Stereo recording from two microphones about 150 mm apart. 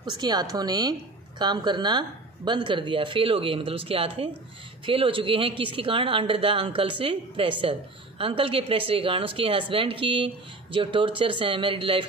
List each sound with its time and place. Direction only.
0.0 s speech: 30° right (ahead or behind)